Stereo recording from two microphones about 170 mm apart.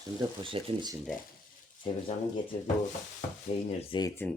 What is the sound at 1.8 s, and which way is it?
Speech, 30° left (ahead or behind).